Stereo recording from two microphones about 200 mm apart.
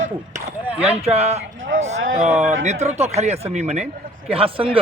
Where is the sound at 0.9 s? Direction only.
30° right (ahead or behind).